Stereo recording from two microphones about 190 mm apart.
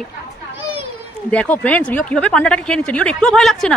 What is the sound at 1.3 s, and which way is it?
A woman's voice, 5° left (ahead or behind).